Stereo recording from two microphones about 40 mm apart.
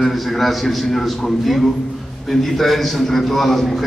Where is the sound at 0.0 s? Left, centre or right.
Centre.